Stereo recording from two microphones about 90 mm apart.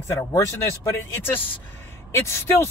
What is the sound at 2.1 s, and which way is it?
Speech, 30° left (ahead or behind).